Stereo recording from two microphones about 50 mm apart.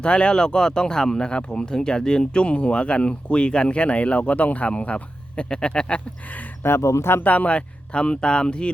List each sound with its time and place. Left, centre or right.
0.0 s speech: centre
6.6 s speech: left
7.2 s speech: left